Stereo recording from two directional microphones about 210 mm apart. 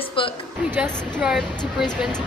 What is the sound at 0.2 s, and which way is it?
Speech, 25° left (ahead or behind).